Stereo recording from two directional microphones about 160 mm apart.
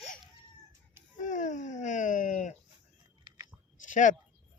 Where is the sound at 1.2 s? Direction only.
50° left (ahead or behind).